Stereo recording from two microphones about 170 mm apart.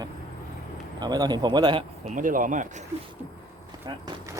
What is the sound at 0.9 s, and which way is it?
Speech, 25° right (ahead or behind).